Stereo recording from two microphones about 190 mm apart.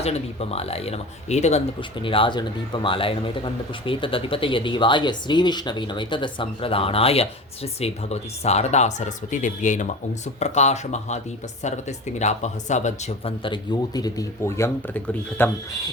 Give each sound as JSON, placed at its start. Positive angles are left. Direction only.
{"t": 0.0, "sound": "speech", "side_deg": 35}